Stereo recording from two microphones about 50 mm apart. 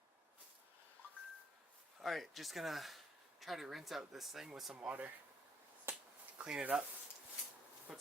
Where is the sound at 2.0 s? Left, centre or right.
Centre.